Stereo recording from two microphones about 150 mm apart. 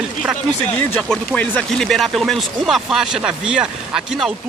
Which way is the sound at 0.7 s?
10° left (ahead or behind).